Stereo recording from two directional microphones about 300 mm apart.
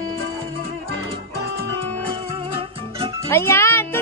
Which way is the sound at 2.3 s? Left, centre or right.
Centre.